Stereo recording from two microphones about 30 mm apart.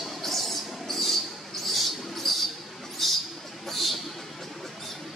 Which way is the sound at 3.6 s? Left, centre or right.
Centre.